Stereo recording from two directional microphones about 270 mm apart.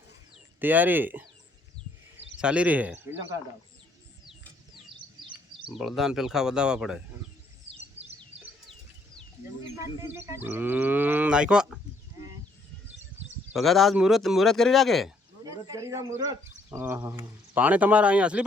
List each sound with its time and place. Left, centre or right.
0.6 s speech: centre
5.7 s speech: centre
7.7 s bird: right
10.0 s speech: centre
13.5 s speech: centre
15.4 s speech: centre